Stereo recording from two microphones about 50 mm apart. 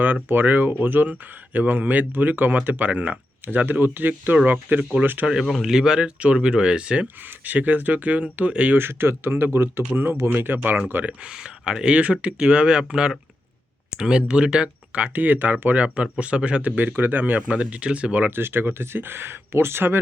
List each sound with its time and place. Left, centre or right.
0.0 s speech: right
4.8 s speech: right
5.2 s speech: centre
5.7 s speech: centre
6.1 s speech: right
7.3 s speech: right
8.7 s speech: right
11.2 s speech: centre
18.3 s speech: right